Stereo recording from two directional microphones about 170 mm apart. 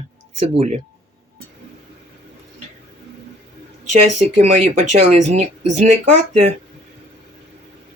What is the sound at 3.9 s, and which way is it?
Speech, 40° right (ahead or behind).